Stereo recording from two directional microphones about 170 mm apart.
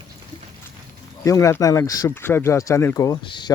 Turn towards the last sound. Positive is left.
turn(degrees=25)  # may be behind; listen again after turning